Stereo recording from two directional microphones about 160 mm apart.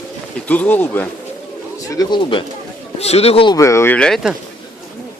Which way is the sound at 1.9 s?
25° left (ahead or behind).